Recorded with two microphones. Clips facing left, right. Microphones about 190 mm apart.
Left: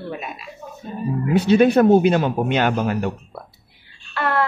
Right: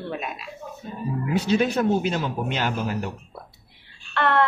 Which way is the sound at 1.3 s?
60° left (ahead or behind).